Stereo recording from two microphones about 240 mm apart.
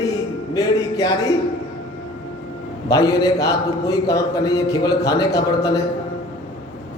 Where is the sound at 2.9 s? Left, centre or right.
Centre.